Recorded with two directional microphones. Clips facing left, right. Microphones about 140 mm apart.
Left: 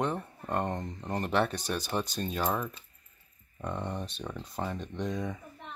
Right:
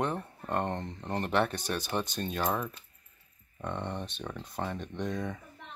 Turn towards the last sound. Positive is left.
turn(degrees=0)  # may be behind; listen again after turning